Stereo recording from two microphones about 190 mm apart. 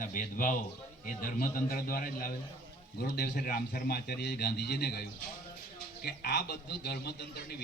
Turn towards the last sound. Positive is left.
turn(degrees=60)  # may be behind; listen again after turning